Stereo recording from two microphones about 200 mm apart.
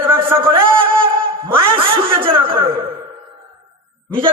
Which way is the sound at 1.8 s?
25° right (ahead or behind).